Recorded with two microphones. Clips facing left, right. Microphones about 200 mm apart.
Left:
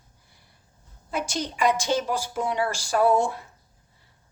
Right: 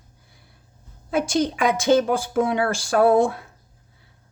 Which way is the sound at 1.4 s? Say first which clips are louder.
Right 2 dB; 55° right (ahead or behind).